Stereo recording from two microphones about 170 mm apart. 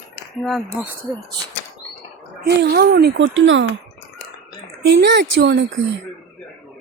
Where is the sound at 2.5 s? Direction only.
75° right (ahead or behind).